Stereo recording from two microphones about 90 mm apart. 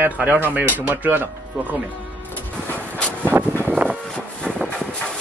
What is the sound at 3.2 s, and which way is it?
Vehicle, 20° right (ahead or behind).